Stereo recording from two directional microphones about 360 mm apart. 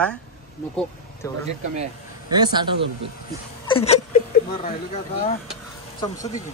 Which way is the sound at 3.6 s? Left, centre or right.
Centre.